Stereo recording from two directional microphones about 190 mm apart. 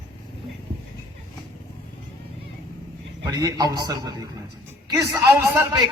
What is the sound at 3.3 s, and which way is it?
A man's voice, 20° right (ahead or behind).